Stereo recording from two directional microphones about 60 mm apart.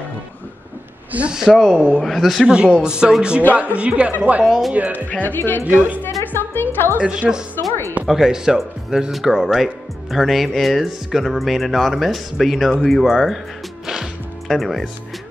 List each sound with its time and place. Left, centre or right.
1.1 s a woman's voice: right
1.5 s a woman's voice: centre
4.5 s speech: centre
4.7 s a woman's voice: right
5.2 s a woman's voice: left
5.6 s a woman's voice: right
6.3 s music: left
7.0 s speech: centre
14.5 s speech: centre